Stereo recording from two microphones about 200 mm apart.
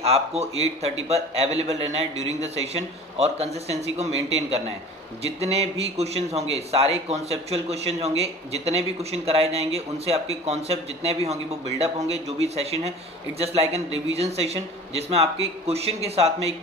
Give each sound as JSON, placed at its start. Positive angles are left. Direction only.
{"t": 0.0, "sound": "a man's voice", "side_deg": -30}
{"t": 12.5, "sound": "a man's voice", "side_deg": -30}